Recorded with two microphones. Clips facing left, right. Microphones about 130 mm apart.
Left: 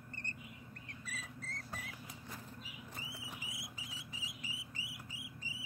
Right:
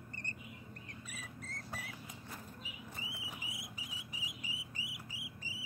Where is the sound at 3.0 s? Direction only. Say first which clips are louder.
Right 1 dB; 15° right (ahead or behind).